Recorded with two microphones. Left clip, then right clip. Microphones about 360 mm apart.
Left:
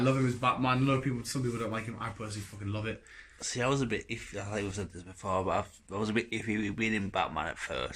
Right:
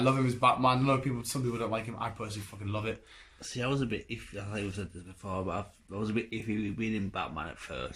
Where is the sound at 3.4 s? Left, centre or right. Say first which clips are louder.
Left 3 dB; centre.